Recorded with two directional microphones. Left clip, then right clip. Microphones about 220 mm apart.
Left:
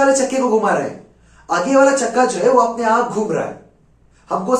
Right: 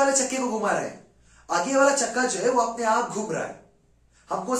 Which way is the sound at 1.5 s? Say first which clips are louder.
Left 8 dB; centre (ahead or behind).